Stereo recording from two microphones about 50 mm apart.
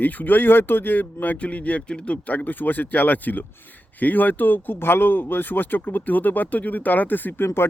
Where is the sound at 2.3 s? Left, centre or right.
Left.